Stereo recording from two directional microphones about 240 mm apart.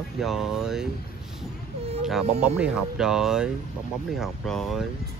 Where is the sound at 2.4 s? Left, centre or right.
Centre.